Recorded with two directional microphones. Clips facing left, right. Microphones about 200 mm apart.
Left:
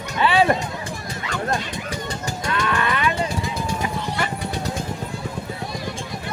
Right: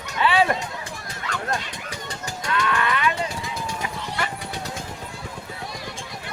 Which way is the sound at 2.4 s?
35° left (ahead or behind).